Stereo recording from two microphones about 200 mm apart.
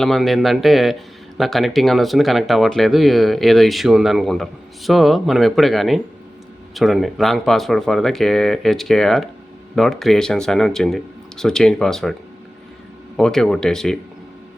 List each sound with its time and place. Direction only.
0.0 s speech: centre (ahead or behind)
13.1 s speech: 5° left (ahead or behind)